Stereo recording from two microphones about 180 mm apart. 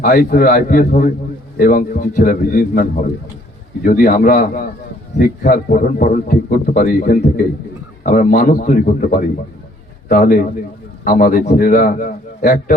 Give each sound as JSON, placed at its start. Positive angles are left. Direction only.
{"t": 0.0, "sound": "a man's voice", "side_deg": 50}